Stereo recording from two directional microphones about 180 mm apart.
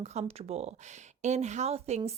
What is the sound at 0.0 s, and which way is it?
Speech, 40° right (ahead or behind).